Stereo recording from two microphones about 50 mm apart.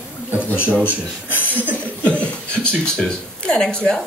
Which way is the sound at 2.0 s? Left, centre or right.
Left.